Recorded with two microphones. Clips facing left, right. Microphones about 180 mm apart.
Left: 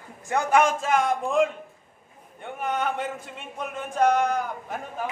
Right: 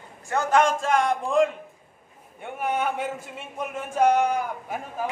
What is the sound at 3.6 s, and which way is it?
A man's voice, 10° right (ahead or behind).